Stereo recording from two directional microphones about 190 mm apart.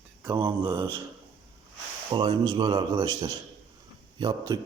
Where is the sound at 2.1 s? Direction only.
20° right (ahead or behind).